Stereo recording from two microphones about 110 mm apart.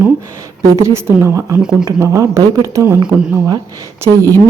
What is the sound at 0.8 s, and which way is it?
A woman's voice, 25° right (ahead or behind).